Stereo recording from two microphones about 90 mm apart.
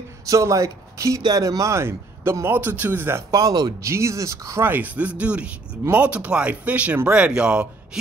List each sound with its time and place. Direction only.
0.3 s a man's voice: 35° right (ahead or behind)
3.3 s speech: 45° right (ahead or behind)
3.8 s speech: 35° right (ahead or behind)
4.6 s speech: 20° right (ahead or behind)